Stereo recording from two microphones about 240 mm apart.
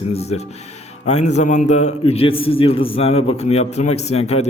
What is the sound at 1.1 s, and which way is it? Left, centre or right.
A man's voice, left.